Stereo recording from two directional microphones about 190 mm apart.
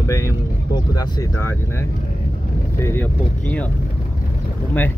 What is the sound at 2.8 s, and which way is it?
Speech, 10° left (ahead or behind).